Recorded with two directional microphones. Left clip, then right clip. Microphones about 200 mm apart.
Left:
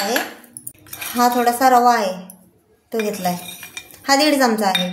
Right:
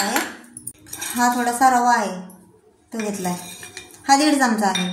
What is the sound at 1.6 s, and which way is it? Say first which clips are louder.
Speech: left 2 dB; 45° left (ahead or behind).